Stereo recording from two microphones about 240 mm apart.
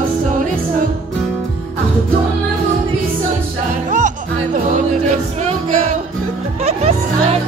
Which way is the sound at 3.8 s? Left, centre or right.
Right.